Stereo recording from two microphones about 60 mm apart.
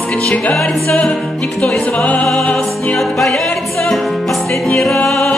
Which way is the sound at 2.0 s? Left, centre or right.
Centre.